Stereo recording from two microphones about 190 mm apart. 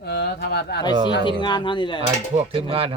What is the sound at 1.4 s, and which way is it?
Speech, 25° left (ahead or behind).